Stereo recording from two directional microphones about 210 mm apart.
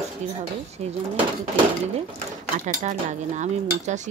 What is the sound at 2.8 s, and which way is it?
Speech, 35° right (ahead or behind).